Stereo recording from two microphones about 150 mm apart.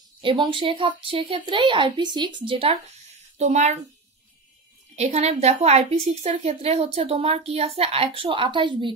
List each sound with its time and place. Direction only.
0.2 s a woman's voice: 35° right (ahead or behind)
3.3 s a woman's voice: 50° right (ahead or behind)
4.9 s a woman's voice: 50° right (ahead or behind); by 8.9 s 30° right (ahead or behind)